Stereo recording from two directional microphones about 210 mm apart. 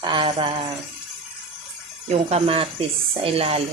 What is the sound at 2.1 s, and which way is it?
Speech, 30° right (ahead or behind).